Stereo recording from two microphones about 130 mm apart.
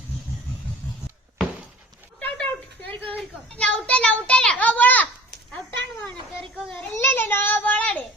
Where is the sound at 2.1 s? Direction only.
10° left (ahead or behind).